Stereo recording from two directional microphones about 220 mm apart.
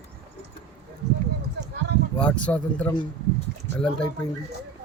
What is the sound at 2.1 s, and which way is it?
Speech, 5° left (ahead or behind).